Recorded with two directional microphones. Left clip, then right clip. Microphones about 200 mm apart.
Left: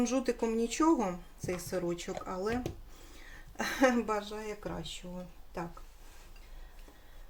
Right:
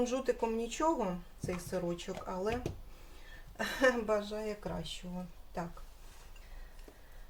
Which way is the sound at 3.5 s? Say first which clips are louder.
Left 1 dB; 40° left (ahead or behind).